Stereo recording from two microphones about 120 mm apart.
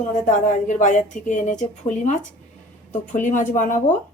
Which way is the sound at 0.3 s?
90° left.